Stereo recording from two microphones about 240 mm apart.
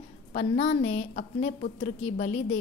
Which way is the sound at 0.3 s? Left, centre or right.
Left.